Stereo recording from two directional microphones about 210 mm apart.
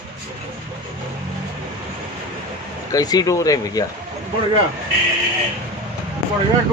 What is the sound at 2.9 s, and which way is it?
Speech, 20° left (ahead or behind).